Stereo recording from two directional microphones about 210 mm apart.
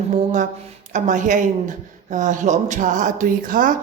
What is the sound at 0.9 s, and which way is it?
A woman's voice, 35° right (ahead or behind).